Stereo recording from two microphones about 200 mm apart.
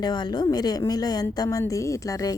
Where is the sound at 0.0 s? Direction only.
20° left (ahead or behind).